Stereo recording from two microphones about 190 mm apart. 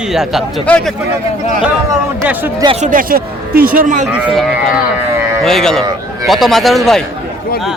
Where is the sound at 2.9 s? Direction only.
50° right (ahead or behind).